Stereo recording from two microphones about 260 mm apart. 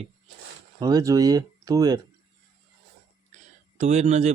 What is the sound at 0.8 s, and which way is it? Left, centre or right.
Speech, centre.